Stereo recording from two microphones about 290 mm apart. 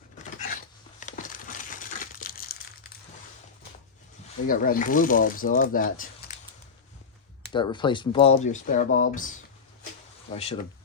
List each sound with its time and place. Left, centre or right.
0.2 s a sound: left
4.4 s speech: left
7.5 s speech: centre
10.3 s speech: left